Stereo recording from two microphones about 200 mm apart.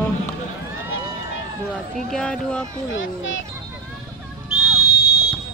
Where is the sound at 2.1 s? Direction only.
5° left (ahead or behind).